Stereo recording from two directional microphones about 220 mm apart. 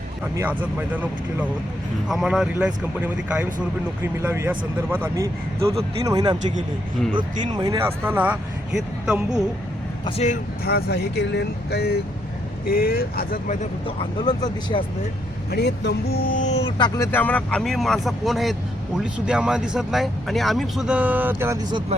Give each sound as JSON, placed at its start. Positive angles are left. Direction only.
{"t": 0.3, "sound": "speech", "side_deg": -10}
{"t": 10.2, "sound": "speech", "side_deg": 35}
{"t": 15.4, "sound": "speech", "side_deg": 45}